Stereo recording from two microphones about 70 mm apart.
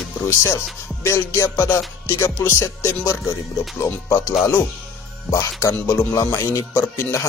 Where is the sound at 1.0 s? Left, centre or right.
Left.